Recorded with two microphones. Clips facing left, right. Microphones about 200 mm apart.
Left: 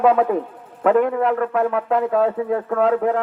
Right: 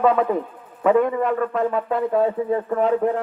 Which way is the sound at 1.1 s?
60° left (ahead or behind).